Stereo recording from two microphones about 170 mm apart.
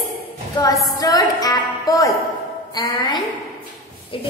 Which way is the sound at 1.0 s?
20° left (ahead or behind).